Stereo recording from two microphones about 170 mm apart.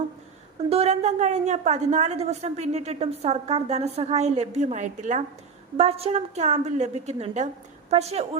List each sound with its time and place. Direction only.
0.7 s a woman's voice: 40° right (ahead or behind)